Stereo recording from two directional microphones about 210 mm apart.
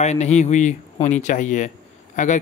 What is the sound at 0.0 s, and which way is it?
Speech, 35° left (ahead or behind).